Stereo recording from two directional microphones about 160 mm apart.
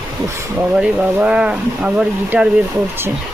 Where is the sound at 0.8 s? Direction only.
5° right (ahead or behind).